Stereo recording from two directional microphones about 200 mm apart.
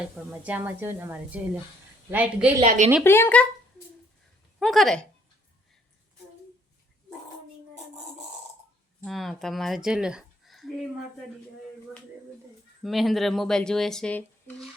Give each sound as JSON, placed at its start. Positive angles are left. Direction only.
{"t": 0.3, "sound": "speech", "side_deg": -10}
{"t": 2.6, "sound": "a woman's voice", "side_deg": -35}
{"t": 3.0, "sound": "speech", "side_deg": 10}
{"t": 4.6, "sound": "speech", "side_deg": 0}
{"t": 9.0, "sound": "speech", "side_deg": 0}
{"t": 12.8, "sound": "speech", "side_deg": 0}